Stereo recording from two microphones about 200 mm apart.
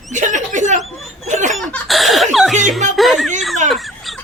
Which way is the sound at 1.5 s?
Centre (ahead or behind).